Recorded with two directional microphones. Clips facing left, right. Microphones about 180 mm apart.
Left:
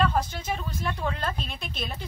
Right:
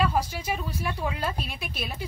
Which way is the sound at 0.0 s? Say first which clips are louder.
Even; 10° right (ahead or behind).